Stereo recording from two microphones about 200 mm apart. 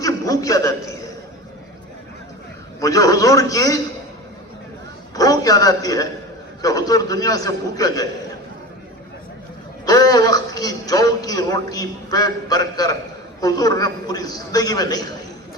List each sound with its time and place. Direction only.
0.0 s a man's voice: 15° left (ahead or behind)
2.8 s a man's voice: 15° left (ahead or behind)
5.1 s a man's voice: 20° left (ahead or behind)
9.8 s a man's voice: 20° left (ahead or behind)